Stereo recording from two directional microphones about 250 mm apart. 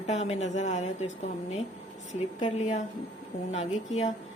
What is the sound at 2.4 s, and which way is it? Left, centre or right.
A woman's voice, left.